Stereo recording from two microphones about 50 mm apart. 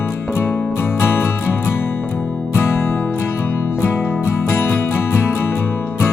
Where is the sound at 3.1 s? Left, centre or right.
Left.